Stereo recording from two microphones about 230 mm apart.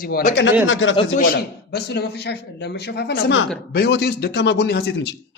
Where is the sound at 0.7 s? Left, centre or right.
Left.